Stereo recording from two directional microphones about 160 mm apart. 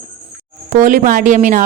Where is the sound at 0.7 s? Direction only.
55° right (ahead or behind).